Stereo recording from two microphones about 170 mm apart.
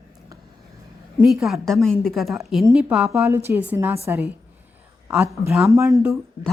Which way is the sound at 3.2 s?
15° right (ahead or behind).